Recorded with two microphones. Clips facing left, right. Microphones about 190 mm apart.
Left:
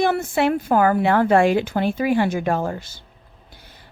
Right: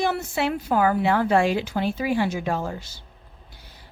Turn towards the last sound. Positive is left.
turn(degrees=50)  # may be behind; listen again after turning